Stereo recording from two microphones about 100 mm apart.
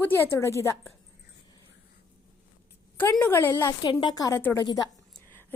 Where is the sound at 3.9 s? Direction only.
55° left (ahead or behind).